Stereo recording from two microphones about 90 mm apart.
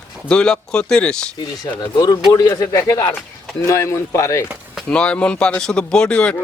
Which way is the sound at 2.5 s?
40° left (ahead or behind).